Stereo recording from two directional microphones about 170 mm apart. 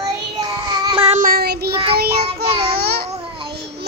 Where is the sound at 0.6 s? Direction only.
30° right (ahead or behind).